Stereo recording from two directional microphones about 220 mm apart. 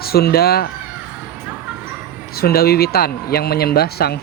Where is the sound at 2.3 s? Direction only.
45° left (ahead or behind).